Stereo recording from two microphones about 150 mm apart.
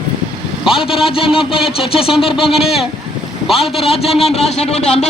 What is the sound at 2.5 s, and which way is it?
A man's voice, centre (ahead or behind).